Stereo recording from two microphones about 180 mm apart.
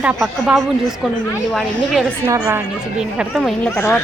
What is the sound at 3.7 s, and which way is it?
Speech, 15° left (ahead or behind).